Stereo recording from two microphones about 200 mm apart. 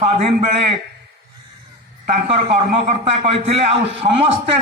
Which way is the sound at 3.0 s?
30° right (ahead or behind).